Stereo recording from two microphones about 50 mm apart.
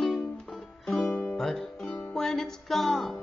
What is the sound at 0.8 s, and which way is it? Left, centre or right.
Music, centre.